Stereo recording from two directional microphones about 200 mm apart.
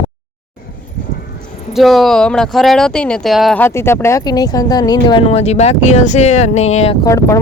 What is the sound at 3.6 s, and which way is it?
Speech, 10° left (ahead or behind).